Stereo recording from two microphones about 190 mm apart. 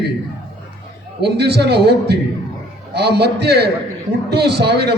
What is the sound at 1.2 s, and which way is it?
A man's voice, 60° right (ahead or behind).